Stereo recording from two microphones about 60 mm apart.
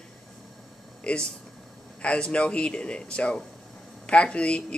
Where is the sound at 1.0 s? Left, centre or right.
Centre.